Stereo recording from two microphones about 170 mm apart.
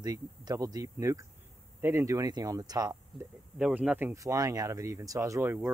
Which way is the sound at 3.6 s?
5° right (ahead or behind).